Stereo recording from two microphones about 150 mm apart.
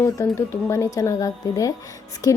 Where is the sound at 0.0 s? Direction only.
20° left (ahead or behind).